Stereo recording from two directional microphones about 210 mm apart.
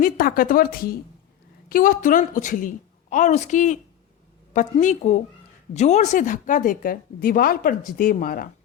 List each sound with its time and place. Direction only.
0.0 s speech: 40° left (ahead or behind)